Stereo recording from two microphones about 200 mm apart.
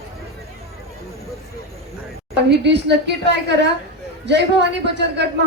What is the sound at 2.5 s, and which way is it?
Speech, 60° right (ahead or behind).